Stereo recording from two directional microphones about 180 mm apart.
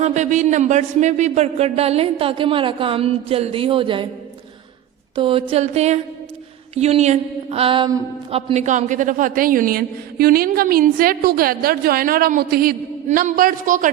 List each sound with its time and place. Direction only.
0.0 s a man's voice: 40° right (ahead or behind)
5.1 s a man's voice: 30° right (ahead or behind)
8.3 s a woman's voice: 35° right (ahead or behind); by 12.7 s 55° right (ahead or behind)
13.1 s a woman's voice: 45° right (ahead or behind)